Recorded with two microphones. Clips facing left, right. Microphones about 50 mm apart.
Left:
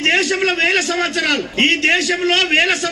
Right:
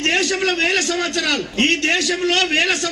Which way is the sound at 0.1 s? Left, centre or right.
Left.